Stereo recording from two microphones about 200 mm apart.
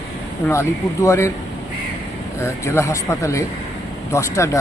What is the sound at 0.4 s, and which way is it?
Speech, 15° left (ahead or behind).